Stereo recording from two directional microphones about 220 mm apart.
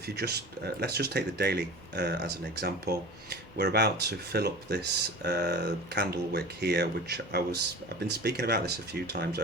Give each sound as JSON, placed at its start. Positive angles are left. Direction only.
{"t": 0.2, "sound": "speech", "side_deg": -45}